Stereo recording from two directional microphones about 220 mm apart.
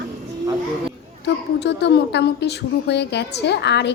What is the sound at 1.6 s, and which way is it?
A woman's voice, 50° left (ahead or behind).